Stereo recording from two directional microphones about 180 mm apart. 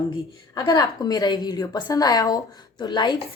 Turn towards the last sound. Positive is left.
turn(degrees=25)  # may be behind; listen again after turning